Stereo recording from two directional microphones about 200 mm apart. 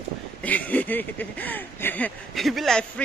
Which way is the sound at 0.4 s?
10° left (ahead or behind).